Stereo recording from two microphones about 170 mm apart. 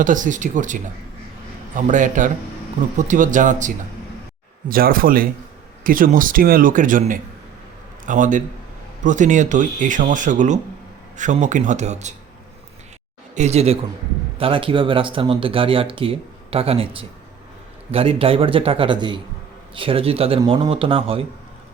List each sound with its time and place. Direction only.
0.0 s speech: 50° right (ahead or behind)
4.7 s speech: 55° right (ahead or behind)
13.3 s speech: 40° right (ahead or behind)